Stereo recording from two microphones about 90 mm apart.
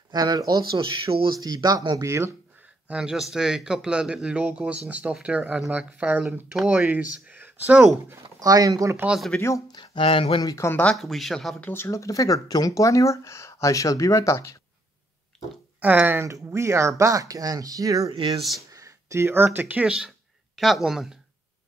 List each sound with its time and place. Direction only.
0.1 s speech: 45° right (ahead or behind)
2.0 s speech: 30° right (ahead or behind)
2.9 s speech: 10° right (ahead or behind)
8.4 s speech: 40° right (ahead or behind)
9.3 s speech: 15° left (ahead or behind)
9.7 s speech: 65° left (ahead or behind); by 10.4 s 90° left
10.4 s speech: 35° left (ahead or behind)
10.7 s speech: 15° left (ahead or behind)
11.0 s speech: centre (ahead or behind)
11.6 s speech: 25° left (ahead or behind)
15.8 s speech: 15° right (ahead or behind)
16.3 s speech: 35° right (ahead or behind)
18.1 s speech: 80° right
18.7 s speech: 35° right (ahead or behind); by 21.2 s 5° right (ahead or behind)